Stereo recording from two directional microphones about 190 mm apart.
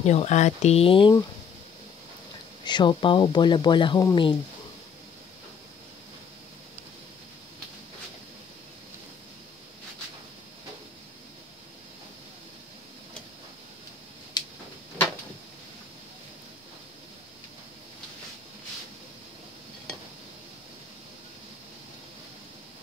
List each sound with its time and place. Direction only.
0.0 s speech: 35° left (ahead or behind)
2.6 s speech: 25° left (ahead or behind)